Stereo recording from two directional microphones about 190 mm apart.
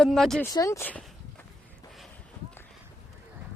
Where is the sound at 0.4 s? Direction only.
15° left (ahead or behind).